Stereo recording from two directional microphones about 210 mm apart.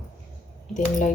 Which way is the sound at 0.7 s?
35° left (ahead or behind).